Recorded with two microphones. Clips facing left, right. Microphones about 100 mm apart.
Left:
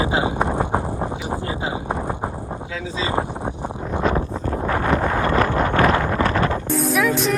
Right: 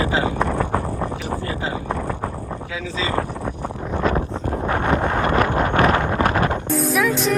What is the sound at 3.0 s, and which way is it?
Speech, 20° left (ahead or behind).